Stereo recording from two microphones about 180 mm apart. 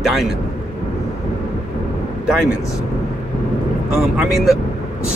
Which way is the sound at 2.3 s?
5° right (ahead or behind).